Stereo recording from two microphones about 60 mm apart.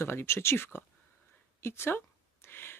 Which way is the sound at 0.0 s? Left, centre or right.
Left.